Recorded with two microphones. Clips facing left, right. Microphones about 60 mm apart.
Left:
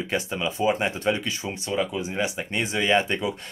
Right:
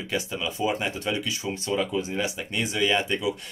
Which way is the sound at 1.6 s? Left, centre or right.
Centre.